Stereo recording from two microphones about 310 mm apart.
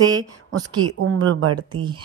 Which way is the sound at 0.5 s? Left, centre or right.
Right.